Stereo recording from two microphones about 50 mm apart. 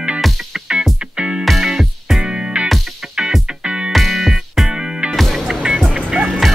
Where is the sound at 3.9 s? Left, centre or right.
Centre.